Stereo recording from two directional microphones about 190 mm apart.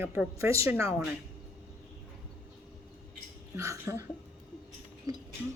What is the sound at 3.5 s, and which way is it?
Speech, 15° right (ahead or behind).